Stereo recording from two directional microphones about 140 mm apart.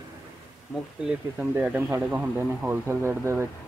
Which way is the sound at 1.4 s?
10° right (ahead or behind).